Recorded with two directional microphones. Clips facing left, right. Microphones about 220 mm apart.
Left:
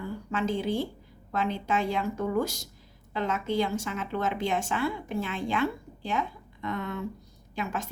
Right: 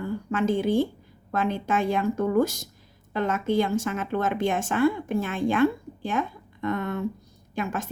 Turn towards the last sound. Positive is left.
turn(degrees=-50)  # may be behind; listen again after turning